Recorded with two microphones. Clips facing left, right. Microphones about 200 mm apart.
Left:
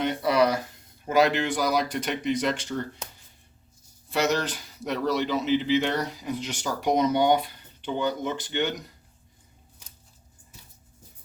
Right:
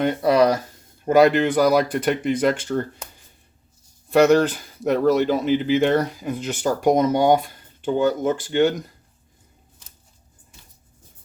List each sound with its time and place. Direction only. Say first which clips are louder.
0.0 s speech: right 5 dB; 45° right (ahead or behind)
4.1 s speech: right 10 dB; 55° right (ahead or behind)